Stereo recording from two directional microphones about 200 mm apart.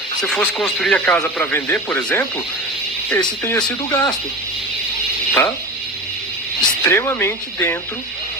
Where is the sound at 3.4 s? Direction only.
15° left (ahead or behind).